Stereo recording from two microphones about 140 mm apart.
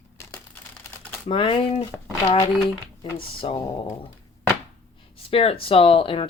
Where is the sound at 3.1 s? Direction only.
40° left (ahead or behind).